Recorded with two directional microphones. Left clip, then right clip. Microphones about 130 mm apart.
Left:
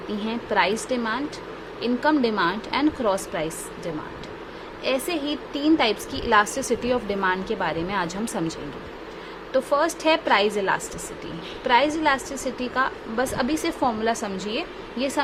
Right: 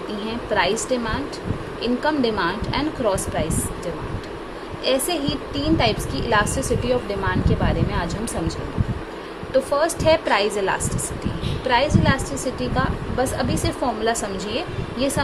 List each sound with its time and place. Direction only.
0.3 s speech: 35° left (ahead or behind)
4.8 s a woman's voice: 25° left (ahead or behind)
5.2 s a woman's voice: 45° left (ahead or behind)
14.0 s speech: 35° left (ahead or behind)